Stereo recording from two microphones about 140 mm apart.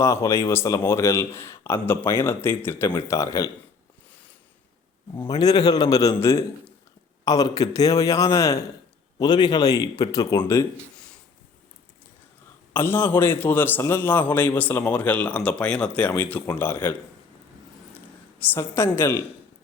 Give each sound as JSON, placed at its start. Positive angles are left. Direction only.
{"t": 0.0, "sound": "speech", "side_deg": 20}
{"t": 5.2, "sound": "speech", "side_deg": 30}
{"t": 12.7, "sound": "a man's voice", "side_deg": 15}
{"t": 18.3, "sound": "a man's voice", "side_deg": 15}